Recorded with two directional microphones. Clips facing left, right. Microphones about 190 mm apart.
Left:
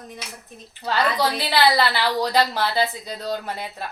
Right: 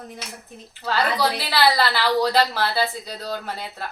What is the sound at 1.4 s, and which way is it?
A woman's voice, 15° left (ahead or behind).